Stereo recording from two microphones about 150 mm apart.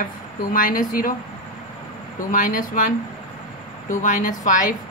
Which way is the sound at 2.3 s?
65° left (ahead or behind).